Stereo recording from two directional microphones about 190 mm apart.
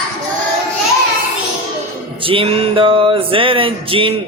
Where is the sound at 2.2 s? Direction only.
30° right (ahead or behind).